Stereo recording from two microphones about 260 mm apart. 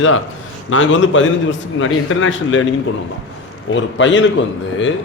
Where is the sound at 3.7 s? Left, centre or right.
Left.